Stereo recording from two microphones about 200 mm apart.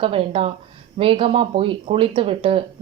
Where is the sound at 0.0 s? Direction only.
25° right (ahead or behind).